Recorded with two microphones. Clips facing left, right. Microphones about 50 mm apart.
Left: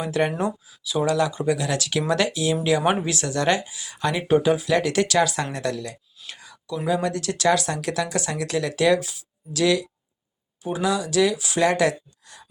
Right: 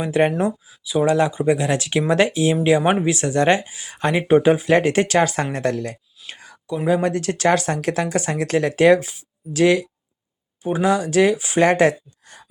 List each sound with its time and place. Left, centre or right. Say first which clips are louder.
0.0 s speech: right 5 dB; right
0.3 s speech: right 4 dB; centre; by 6.0 s right
6.2 s whispering: right 3 dB; right
6.8 s speech: right 5 dB; right